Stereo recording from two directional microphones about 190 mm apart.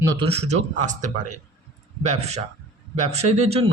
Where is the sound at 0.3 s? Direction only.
35° right (ahead or behind).